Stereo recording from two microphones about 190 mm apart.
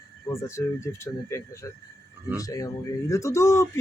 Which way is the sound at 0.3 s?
15° left (ahead or behind).